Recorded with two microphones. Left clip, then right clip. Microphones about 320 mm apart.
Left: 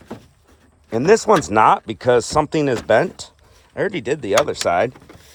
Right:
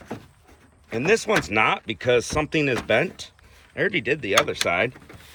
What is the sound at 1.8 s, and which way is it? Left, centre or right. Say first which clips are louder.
Speech: left 5 dB; left.